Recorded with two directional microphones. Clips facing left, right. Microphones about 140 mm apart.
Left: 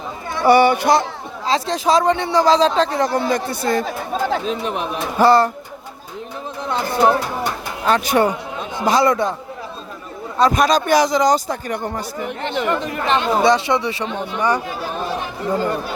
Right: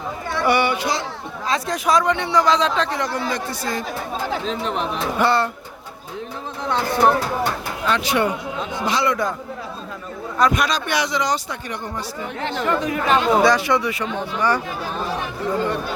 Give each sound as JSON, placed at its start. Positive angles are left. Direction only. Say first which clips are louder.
{"t": 0.4, "sound": "speech", "louder": "left 7 dB", "side_deg": 40}
{"t": 1.5, "sound": "a man's voice", "louder": "left 3 dB", "side_deg": 30}
{"t": 3.3, "sound": "speech", "louder": "left 6 dB", "side_deg": 55}
{"t": 4.4, "sound": "speech", "louder": "left 1 dB", "side_deg": 15}
{"t": 5.1, "sound": "a man's voice", "louder": "left 6 dB", "side_deg": 40}
{"t": 6.7, "sound": "speech", "louder": "left 1 dB", "side_deg": 10}
{"t": 7.9, "sound": "speech", "louder": "left 4 dB", "side_deg": 45}
{"t": 10.3, "sound": "a man's voice", "louder": "left 4 dB", "side_deg": 35}
{"t": 12.5, "sound": "speech", "louder": "left 1 dB", "side_deg": 15}
{"t": 13.1, "sound": "speech", "louder": "right 1 dB", "side_deg": -5}
{"t": 13.4, "sound": "speech", "louder": "left 1 dB", "side_deg": 25}